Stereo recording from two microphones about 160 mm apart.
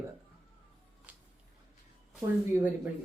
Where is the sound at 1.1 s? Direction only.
10° right (ahead or behind).